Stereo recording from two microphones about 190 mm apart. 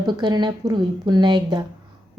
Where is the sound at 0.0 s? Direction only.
25° right (ahead or behind).